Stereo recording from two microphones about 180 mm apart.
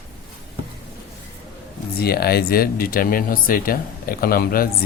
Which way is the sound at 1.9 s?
60° left (ahead or behind).